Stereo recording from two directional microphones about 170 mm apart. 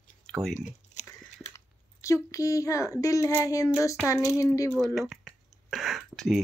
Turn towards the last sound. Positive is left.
turn(degrees=0)  # may be behind; listen again after turning